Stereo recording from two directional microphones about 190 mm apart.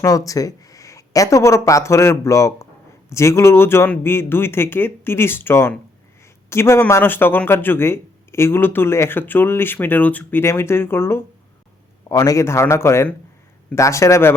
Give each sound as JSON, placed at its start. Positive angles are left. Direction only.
{"t": 0.0, "sound": "speech", "side_deg": 20}